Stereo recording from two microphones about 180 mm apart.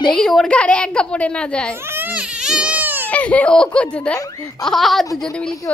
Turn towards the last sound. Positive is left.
turn(degrees=5)  # may be behind; listen again after turning